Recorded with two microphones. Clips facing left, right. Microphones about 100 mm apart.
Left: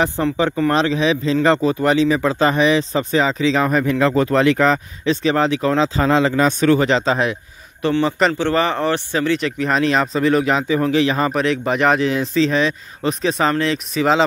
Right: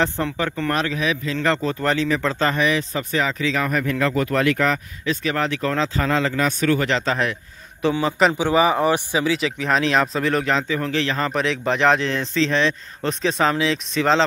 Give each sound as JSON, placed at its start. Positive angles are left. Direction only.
{"t": 0.2, "sound": "speech", "side_deg": 15}
{"t": 0.7, "sound": "a man's voice", "side_deg": 25}
{"t": 7.9, "sound": "speech", "side_deg": 0}
{"t": 10.7, "sound": "speech", "side_deg": 15}
{"t": 11.3, "sound": "speech", "side_deg": 0}